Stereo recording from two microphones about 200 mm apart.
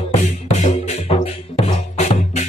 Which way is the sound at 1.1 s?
30° left (ahead or behind).